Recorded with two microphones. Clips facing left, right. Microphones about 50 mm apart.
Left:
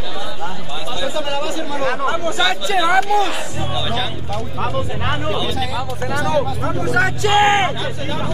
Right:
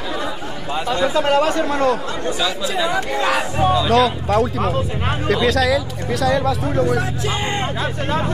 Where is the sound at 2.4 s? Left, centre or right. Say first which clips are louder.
Left 4 dB; left.